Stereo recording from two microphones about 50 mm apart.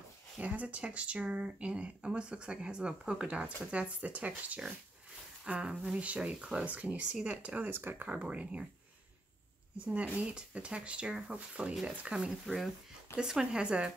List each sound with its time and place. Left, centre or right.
0.4 s speech: right
5.6 s speech: centre
7.6 s speech: right
8.1 s speech: right
9.8 s speech: right
12.5 s speech: centre
13.2 s speech: centre